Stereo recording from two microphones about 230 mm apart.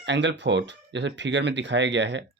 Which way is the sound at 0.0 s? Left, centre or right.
Right.